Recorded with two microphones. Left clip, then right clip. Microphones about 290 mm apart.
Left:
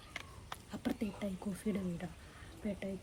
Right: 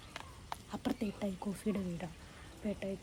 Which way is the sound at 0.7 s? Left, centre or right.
Centre.